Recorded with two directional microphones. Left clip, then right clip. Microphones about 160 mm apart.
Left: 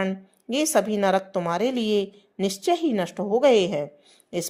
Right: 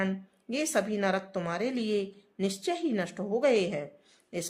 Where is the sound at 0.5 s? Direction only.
35° left (ahead or behind).